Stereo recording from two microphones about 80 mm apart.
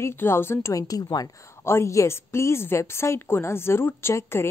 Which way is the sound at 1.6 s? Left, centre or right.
Left.